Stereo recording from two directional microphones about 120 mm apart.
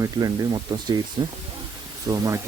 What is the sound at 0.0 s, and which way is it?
Speech, 35° right (ahead or behind).